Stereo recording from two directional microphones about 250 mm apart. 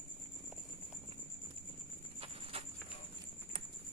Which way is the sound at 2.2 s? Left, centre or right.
Right.